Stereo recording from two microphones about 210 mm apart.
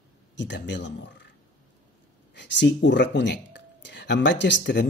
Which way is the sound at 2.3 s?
55° left (ahead or behind).